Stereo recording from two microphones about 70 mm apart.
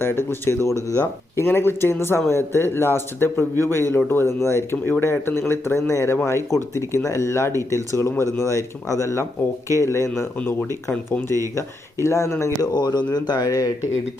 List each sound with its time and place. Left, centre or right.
0.0 s a man's voice: left
0.9 s speech: left
1.5 s a man's voice: left
10.3 s a man's voice: left
11.5 s speech: left
12.6 s speech: left